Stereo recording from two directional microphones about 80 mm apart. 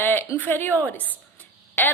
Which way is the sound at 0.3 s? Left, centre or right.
Left.